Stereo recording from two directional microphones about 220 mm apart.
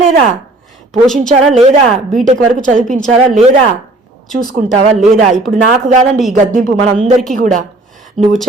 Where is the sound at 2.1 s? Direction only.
35° right (ahead or behind).